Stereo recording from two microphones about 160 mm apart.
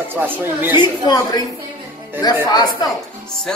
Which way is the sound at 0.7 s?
25° left (ahead or behind).